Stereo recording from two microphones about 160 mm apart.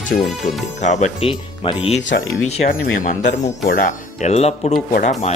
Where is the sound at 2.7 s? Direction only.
55° left (ahead or behind).